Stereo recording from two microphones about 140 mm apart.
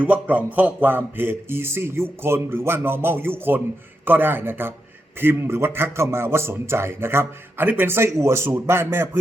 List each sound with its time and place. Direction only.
0.0 s a man's voice: 10° right (ahead or behind)